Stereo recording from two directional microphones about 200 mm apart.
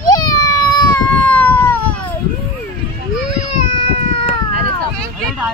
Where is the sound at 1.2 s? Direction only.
10° left (ahead or behind).